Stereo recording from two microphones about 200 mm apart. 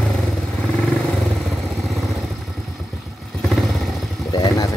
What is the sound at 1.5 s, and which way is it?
Vehicle, centre (ahead or behind).